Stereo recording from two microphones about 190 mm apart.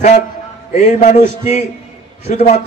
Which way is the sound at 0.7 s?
40° left (ahead or behind).